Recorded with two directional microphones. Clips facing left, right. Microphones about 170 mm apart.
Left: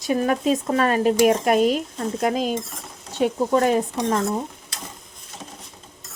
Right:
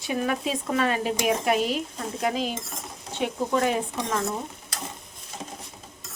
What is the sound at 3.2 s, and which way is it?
Speech, 40° left (ahead or behind).